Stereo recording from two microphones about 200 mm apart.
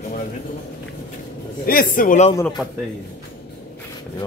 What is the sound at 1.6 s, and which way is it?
Speech, 45° left (ahead or behind).